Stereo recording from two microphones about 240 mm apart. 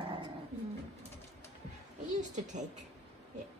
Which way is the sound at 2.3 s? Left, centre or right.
Right.